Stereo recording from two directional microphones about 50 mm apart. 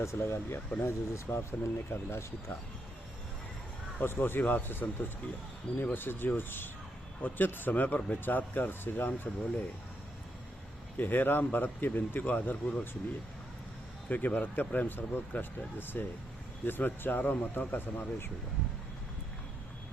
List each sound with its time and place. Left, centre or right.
0.0 s speech: left
4.0 s speech: left
10.9 s speech: left
12.2 s speech: left
14.1 s speech: left